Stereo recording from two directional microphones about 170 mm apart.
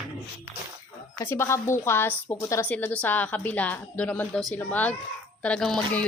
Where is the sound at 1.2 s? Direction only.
15° left (ahead or behind).